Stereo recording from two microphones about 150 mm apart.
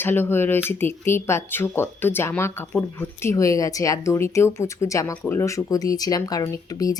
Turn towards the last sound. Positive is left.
turn(degrees=25)  # may be behind; listen again after turning